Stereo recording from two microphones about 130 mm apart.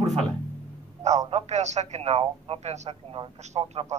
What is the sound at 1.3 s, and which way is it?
Speech, 60° right (ahead or behind).